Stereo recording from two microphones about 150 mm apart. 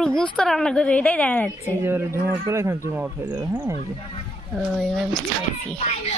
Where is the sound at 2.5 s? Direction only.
20° right (ahead or behind).